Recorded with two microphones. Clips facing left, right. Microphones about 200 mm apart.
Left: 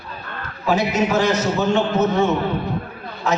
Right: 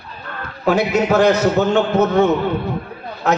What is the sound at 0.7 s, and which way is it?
A man's voice, 60° right (ahead or behind).